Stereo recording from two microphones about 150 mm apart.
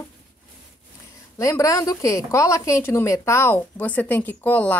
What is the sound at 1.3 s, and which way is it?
A woman's voice, 20° left (ahead or behind).